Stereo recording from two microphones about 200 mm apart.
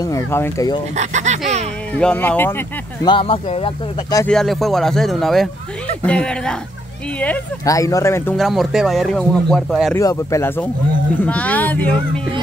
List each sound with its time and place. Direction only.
0.0 s speech: 15° left (ahead or behind)
0.9 s speech: 35° right (ahead or behind)
2.0 s speech: 5° left (ahead or behind)
3.1 s speech: 25° left (ahead or behind)
4.3 s speech: centre (ahead or behind)
8.4 s speech: centre (ahead or behind)
9.9 s speech: 15° left (ahead or behind)